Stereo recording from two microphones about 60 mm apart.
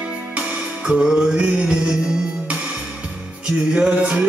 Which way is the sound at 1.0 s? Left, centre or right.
Centre.